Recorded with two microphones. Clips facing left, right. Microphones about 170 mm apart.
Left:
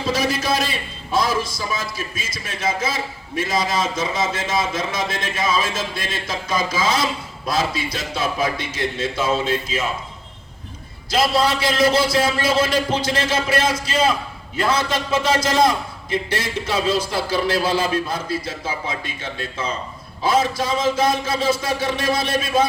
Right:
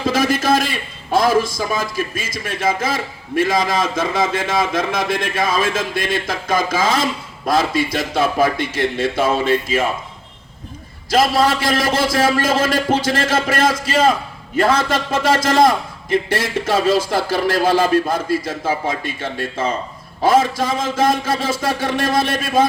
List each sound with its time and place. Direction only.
0.1 s a man's voice: 50° right (ahead or behind)
11.1 s a man's voice: 45° right (ahead or behind)